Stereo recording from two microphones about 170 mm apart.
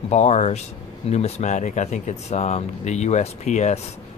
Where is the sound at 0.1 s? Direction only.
40° left (ahead or behind).